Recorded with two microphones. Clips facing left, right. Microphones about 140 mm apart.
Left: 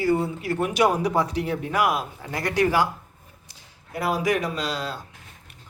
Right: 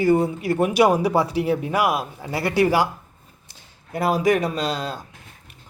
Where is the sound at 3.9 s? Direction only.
25° right (ahead or behind).